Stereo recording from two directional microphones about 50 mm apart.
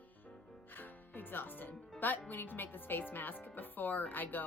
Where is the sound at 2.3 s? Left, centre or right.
Left.